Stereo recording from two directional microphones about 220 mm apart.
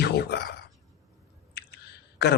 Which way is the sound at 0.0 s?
50° left (ahead or behind).